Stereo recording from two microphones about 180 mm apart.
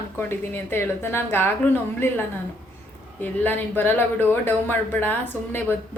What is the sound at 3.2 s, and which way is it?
Speech, 10° left (ahead or behind).